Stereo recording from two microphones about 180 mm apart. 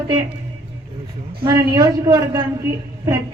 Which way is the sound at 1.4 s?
25° right (ahead or behind).